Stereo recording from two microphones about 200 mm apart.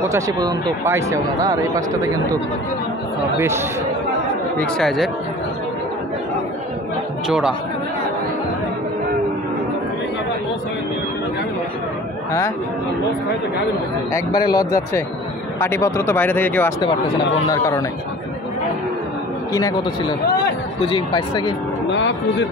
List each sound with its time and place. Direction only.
0.1 s speech: 15° right (ahead or behind)
3.3 s speech: 10° right (ahead or behind)
4.6 s speech: 5° left (ahead or behind)
7.2 s speech: 5° right (ahead or behind)
14.1 s speech: 20° left (ahead or behind)
20.8 s speech: 25° left (ahead or behind)
21.9 s a man's voice: 65° left (ahead or behind)